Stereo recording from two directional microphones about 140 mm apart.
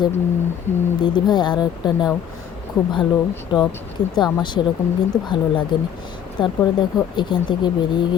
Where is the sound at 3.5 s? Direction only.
35° left (ahead or behind).